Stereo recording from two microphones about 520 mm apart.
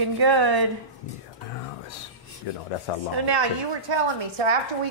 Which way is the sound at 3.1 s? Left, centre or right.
Right.